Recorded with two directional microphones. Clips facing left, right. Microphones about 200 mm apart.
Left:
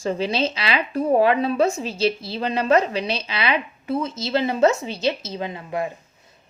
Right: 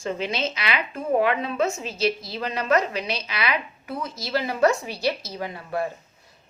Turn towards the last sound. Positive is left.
turn(degrees=20)  # may be behind; listen again after turning